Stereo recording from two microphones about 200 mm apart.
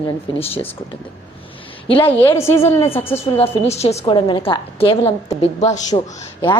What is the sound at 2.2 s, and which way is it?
A woman's voice, 10° left (ahead or behind).